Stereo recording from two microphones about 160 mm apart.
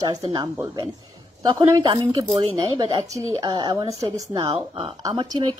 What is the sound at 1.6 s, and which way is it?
A woman's voice, 25° right (ahead or behind).